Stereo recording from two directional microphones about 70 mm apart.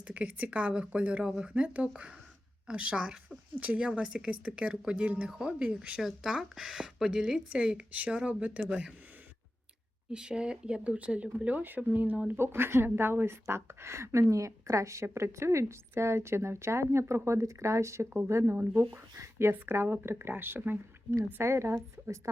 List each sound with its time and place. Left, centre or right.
0.0 s speech: centre
10.1 s speech: centre
12.4 s a woman's voice: right